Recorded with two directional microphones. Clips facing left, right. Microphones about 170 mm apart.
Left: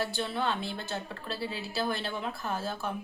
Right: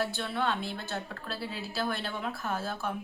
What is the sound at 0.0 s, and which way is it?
Speech, centre (ahead or behind).